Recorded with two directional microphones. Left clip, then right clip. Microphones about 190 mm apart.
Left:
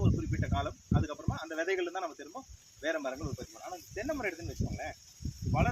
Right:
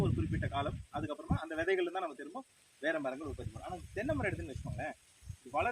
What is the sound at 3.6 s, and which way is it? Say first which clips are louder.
Cricket: even; 5° left (ahead or behind).